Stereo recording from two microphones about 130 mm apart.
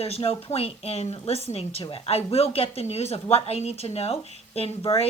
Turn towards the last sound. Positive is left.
turn(degrees=50)  # may be behind; listen again after turning